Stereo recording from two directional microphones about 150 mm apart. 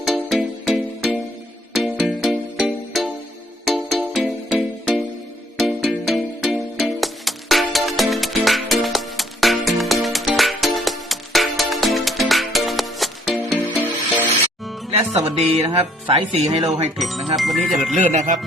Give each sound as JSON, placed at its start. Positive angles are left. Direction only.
{"t": 0.0, "sound": "music", "side_deg": 0}
{"t": 14.8, "sound": "speech", "side_deg": -45}
{"t": 17.0, "sound": "speech", "side_deg": 0}
{"t": 17.9, "sound": "speech", "side_deg": -55}